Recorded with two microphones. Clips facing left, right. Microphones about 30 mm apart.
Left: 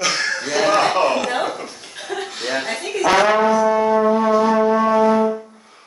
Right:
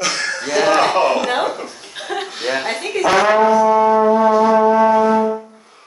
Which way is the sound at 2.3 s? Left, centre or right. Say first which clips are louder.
Right 2 dB; centre.